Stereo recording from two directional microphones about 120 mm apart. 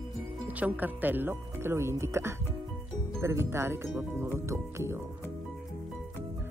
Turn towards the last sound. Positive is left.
turn(degrees=-20)  # may be behind; listen again after turning